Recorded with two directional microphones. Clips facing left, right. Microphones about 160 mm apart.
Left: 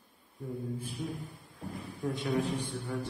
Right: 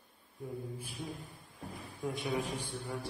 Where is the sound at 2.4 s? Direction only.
10° right (ahead or behind).